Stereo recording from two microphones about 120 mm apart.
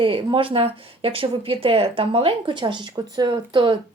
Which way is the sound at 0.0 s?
50° right (ahead or behind).